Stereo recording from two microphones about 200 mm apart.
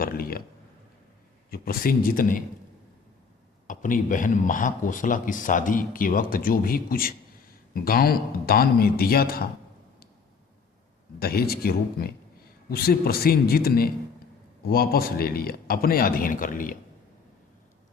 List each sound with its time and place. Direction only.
0.0 s speech: 45° left (ahead or behind)
1.5 s speech: 50° left (ahead or behind)
3.7 s speech: 40° left (ahead or behind)
11.2 s speech: 50° left (ahead or behind)